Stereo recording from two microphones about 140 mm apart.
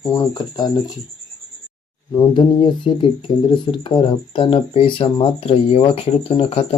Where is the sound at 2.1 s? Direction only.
30° left (ahead or behind).